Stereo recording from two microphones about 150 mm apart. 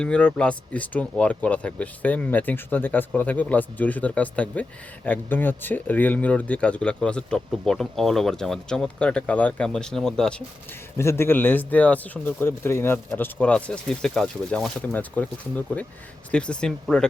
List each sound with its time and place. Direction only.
0.0 s speech: 5° left (ahead or behind)
10.9 s speech: 15° left (ahead or behind)